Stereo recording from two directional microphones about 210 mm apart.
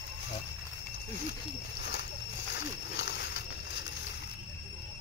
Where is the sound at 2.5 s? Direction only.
55° left (ahead or behind).